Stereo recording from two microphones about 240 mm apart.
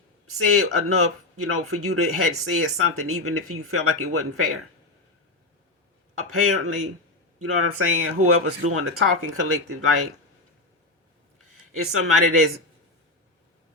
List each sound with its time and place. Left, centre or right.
0.3 s speech: right
6.1 s speech: right
11.7 s speech: right